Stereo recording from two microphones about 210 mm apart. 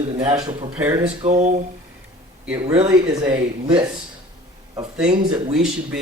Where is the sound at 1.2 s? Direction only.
35° right (ahead or behind).